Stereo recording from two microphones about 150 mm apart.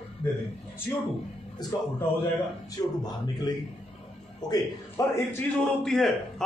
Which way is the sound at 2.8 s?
25° left (ahead or behind).